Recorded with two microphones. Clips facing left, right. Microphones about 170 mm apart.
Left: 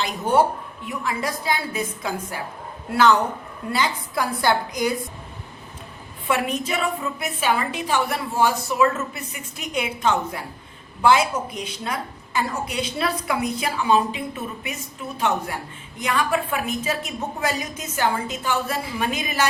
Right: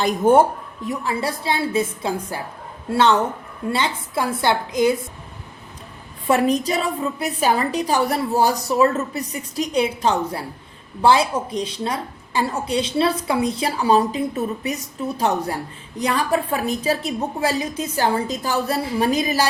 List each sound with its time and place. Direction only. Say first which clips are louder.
0.0 s speech: right 5 dB; 50° right (ahead or behind)
0.9 s a woman's voice: right 3 dB; 30° right (ahead or behind)
6.2 s a woman's voice: right 6 dB; 35° right (ahead or behind)